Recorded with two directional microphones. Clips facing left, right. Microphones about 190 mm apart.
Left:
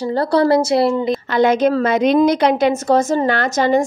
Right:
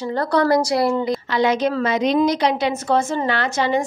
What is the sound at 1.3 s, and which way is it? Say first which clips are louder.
A woman's voice: left 5 dB; 50° left (ahead or behind).